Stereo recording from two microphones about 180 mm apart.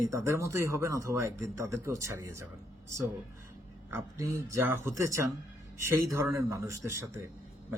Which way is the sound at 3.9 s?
15° right (ahead or behind).